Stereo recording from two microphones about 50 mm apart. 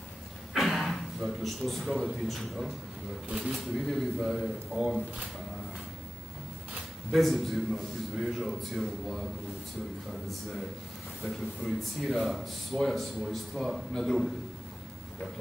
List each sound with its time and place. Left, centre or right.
0.5 s speech: centre
3.3 s speech: right
3.8 s speech: centre
7.1 s speech: centre
11.2 s speech: centre